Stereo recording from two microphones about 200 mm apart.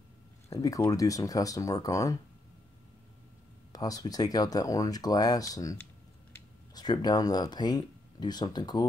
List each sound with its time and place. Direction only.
0.5 s speech: 15° left (ahead or behind)
3.7 s speech: 20° left (ahead or behind)